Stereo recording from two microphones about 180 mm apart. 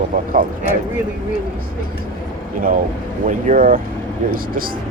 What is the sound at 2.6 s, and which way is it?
Speech, 50° right (ahead or behind).